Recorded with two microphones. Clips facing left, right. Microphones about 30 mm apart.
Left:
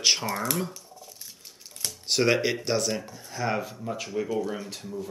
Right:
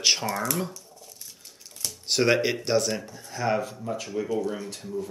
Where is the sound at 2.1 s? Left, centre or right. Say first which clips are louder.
Right 1 dB; centre.